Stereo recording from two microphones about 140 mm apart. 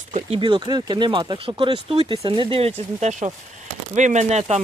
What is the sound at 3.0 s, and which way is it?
Speech, 55° right (ahead or behind).